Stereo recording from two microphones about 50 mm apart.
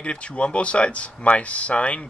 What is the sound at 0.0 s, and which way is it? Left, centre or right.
Speech, left.